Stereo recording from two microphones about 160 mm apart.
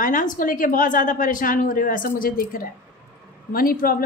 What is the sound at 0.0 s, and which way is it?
A woman's voice, 55° left (ahead or behind).